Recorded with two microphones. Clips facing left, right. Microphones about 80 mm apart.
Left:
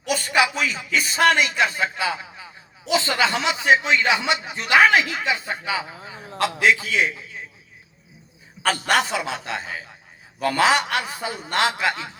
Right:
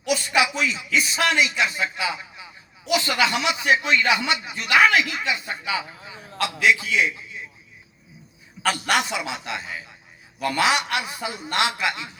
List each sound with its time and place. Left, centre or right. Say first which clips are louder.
0.1 s a man's voice: left 1 dB; left
8.6 s a man's voice: left 2 dB; left